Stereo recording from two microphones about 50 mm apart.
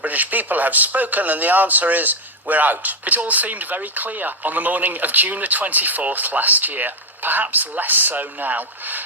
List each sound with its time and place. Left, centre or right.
0.0 s a man's voice: right